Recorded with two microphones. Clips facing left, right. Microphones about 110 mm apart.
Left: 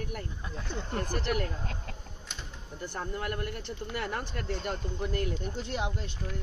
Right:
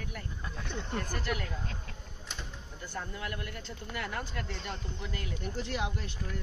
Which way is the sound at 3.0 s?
40° left (ahead or behind).